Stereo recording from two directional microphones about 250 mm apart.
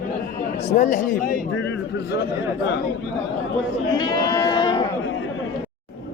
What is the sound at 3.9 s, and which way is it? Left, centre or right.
Speech, centre.